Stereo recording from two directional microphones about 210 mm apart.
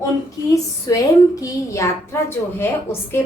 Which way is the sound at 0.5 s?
15° left (ahead or behind).